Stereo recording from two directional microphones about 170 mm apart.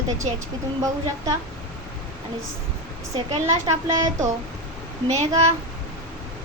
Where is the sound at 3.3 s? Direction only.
20° right (ahead or behind).